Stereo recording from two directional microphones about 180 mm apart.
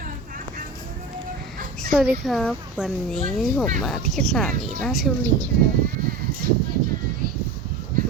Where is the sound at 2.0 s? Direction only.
Centre (ahead or behind).